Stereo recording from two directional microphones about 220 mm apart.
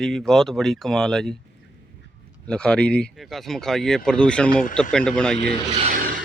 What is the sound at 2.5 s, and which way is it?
Speech, 5° left (ahead or behind).